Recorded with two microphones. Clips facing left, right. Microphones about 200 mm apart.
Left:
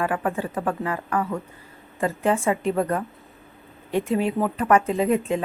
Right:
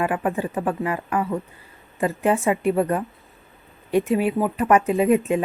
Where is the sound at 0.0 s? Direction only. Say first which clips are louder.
Right 2 dB; 15° right (ahead or behind).